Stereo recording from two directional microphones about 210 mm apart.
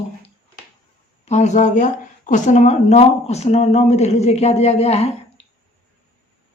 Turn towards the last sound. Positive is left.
turn(degrees=30)  # may be behind; listen again after turning